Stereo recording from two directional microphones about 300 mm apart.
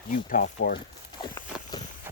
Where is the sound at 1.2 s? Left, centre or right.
Centre.